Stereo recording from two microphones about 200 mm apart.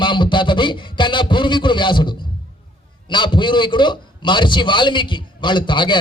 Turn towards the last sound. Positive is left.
turn(degrees=25)  # may be behind; listen again after turning